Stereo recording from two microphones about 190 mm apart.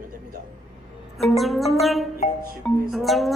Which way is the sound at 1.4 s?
Centre (ahead or behind).